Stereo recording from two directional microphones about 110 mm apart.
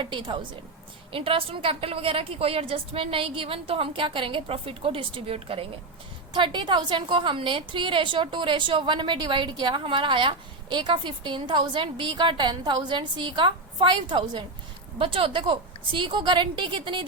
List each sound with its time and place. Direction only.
0.0 s a woman's voice: 45° right (ahead or behind)
6.3 s a woman's voice: 45° right (ahead or behind)
14.9 s a woman's voice: 55° right (ahead or behind)